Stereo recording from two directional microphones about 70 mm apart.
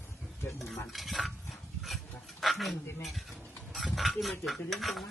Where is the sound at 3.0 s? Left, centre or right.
Centre.